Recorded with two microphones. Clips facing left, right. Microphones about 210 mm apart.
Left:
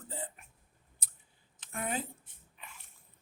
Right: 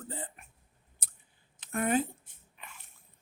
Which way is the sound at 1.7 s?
60° right (ahead or behind).